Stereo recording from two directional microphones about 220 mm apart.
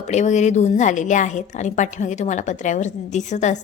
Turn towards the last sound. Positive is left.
turn(degrees=30)  # may be behind; listen again after turning